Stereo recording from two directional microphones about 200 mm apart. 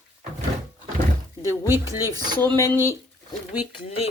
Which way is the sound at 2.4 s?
10° left (ahead or behind).